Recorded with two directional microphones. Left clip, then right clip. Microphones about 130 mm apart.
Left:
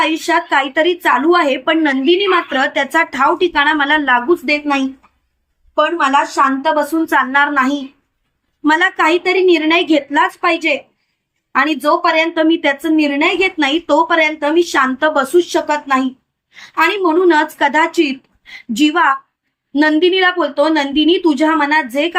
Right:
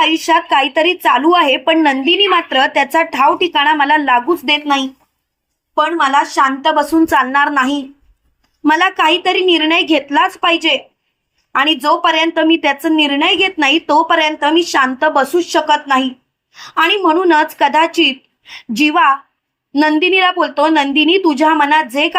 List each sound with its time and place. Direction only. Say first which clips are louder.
0.1 s a woman's voice: right 2 dB; 40° right (ahead or behind)
5.7 s speech: right 1 dB; 80° right; by 7.8 s 55° right (ahead or behind)
8.6 s a woman's voice: right 1 dB; 40° right (ahead or behind)